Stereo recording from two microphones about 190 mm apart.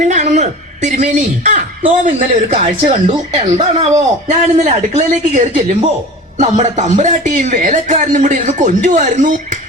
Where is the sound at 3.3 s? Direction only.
25° right (ahead or behind).